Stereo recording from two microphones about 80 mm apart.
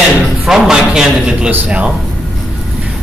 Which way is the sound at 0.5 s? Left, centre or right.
Centre.